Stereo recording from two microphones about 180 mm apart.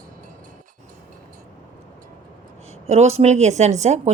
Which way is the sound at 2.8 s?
35° right (ahead or behind).